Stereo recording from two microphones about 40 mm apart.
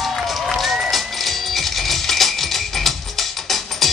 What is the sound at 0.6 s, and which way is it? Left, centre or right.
Run, centre.